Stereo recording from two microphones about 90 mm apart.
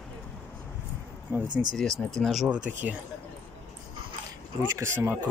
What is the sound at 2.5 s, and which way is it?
Speech, 15° right (ahead or behind).